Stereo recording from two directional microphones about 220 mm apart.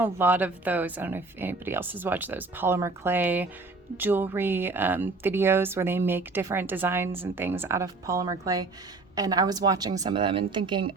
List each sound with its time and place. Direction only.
0.0 s speech: 10° right (ahead or behind)